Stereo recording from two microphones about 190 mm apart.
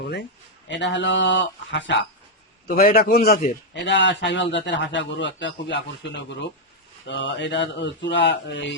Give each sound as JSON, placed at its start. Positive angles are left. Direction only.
{"t": 0.0, "sound": "a man's voice", "side_deg": 60}
{"t": 2.6, "sound": "a man's voice", "side_deg": 50}
{"t": 7.1, "sound": "a man's voice", "side_deg": 70}